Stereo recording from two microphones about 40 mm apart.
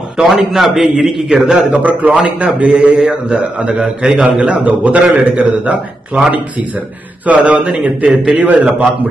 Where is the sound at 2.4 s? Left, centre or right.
Right.